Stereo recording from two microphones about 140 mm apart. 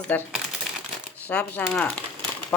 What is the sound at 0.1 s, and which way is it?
Speech, 10° left (ahead or behind).